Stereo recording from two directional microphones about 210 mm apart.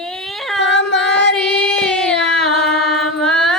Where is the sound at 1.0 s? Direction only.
55° left (ahead or behind).